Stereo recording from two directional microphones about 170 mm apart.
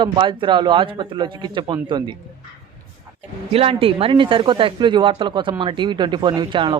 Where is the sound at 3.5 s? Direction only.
35° right (ahead or behind).